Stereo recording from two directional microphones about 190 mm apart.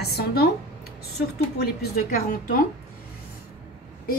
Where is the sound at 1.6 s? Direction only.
55° left (ahead or behind).